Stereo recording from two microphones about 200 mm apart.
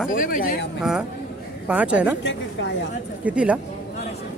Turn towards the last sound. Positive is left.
turn(degrees=-5)  # may be behind; listen again after turning